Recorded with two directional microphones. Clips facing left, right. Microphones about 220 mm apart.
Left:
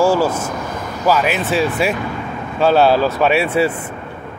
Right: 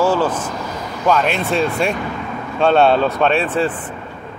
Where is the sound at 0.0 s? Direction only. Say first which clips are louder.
Left 2 dB; 10° left (ahead or behind).